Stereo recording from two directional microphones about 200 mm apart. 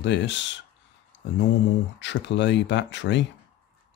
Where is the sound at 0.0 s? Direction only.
60° left (ahead or behind).